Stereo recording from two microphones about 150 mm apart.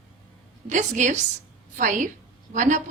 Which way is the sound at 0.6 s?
55° right (ahead or behind).